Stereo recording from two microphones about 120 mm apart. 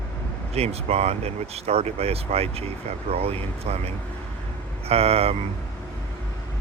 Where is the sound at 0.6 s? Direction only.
60° right (ahead or behind).